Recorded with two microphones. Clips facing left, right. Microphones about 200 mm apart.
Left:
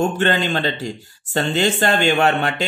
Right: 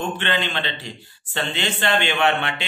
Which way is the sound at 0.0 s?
40° left (ahead or behind).